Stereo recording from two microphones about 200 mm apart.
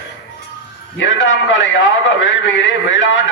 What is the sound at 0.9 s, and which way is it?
A man's voice, 70° left (ahead or behind).